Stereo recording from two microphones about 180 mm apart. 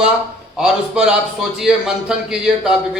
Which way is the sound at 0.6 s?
5° right (ahead or behind).